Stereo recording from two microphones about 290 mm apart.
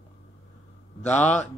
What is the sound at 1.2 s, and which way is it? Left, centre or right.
Speech, left.